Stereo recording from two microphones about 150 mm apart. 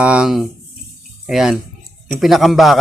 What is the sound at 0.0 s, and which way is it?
A man's voice, 5° right (ahead or behind).